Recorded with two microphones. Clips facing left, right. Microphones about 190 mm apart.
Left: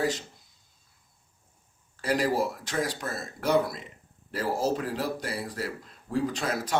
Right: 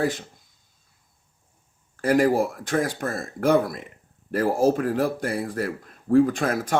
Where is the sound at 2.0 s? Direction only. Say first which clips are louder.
Right 7 dB; 50° right (ahead or behind).